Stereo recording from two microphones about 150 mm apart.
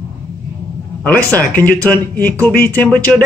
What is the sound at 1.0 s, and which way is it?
Speech, 10° left (ahead or behind).